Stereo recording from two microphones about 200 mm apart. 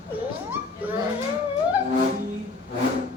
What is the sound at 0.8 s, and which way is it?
Speech, 10° right (ahead or behind).